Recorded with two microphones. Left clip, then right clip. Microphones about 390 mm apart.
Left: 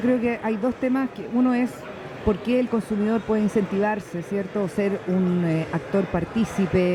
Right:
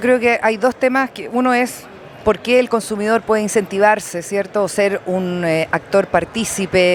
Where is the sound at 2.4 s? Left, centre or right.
Right.